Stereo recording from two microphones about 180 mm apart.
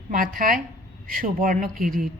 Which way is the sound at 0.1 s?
50° right (ahead or behind).